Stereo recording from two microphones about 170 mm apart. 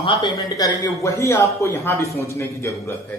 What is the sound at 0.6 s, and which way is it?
Speech, 15° left (ahead or behind).